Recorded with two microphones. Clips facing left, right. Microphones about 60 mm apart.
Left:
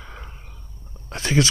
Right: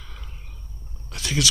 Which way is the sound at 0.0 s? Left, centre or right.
Left.